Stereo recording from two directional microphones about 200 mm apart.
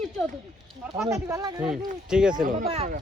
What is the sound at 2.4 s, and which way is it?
Speech, 40° right (ahead or behind).